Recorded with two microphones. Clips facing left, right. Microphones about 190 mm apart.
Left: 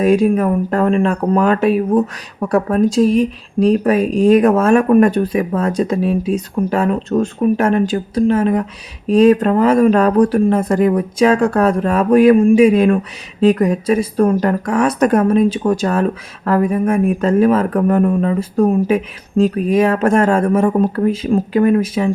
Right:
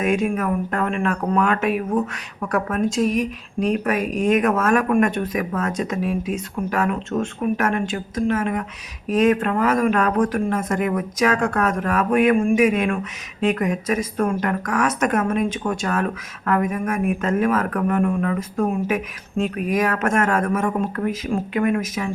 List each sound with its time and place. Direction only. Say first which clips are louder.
0.0 s speech: left 8 dB; 35° left (ahead or behind)